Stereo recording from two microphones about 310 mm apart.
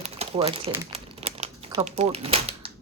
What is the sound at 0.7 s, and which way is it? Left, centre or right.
Crumpling, centre.